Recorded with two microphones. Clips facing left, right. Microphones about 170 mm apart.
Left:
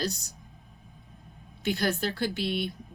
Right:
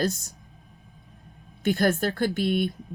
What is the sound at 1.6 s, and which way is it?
A woman's voice, 50° right (ahead or behind).